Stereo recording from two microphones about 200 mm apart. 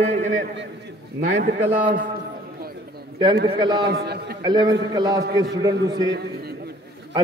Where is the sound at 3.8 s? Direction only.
55° right (ahead or behind).